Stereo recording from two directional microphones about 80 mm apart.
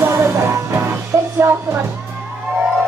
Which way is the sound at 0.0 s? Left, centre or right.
Right.